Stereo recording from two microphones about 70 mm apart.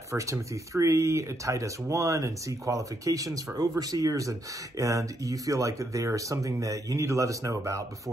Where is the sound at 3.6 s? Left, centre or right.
Right.